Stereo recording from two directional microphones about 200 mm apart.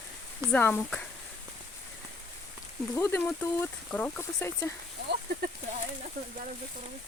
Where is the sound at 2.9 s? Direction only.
10° left (ahead or behind).